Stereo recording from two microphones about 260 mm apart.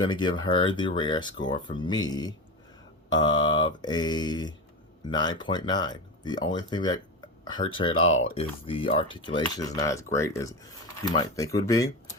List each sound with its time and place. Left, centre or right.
0.0 s cutlery: centre
7.4 s speech: centre
8.4 s cutlery: left